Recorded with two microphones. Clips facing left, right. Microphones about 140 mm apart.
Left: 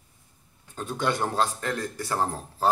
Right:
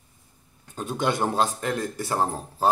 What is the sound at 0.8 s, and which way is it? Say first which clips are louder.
Speech: right 2 dB; 15° right (ahead or behind).